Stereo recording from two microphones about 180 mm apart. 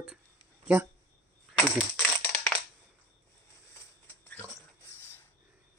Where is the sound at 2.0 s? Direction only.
5° left (ahead or behind).